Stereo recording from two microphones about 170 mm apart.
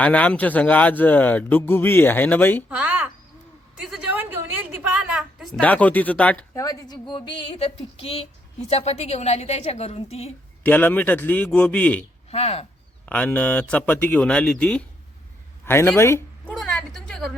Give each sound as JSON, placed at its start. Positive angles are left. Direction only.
{"t": 0.0, "sound": "speech", "side_deg": 10}
{"t": 2.6, "sound": "a woman's voice", "side_deg": -10}
{"t": 6.6, "sound": "a woman's voice", "side_deg": 20}
{"t": 10.6, "sound": "speech", "side_deg": 10}
{"t": 12.3, "sound": "a woman's voice", "side_deg": 35}
{"t": 13.1, "sound": "speech", "side_deg": 10}
{"t": 16.6, "sound": "a sound", "side_deg": 5}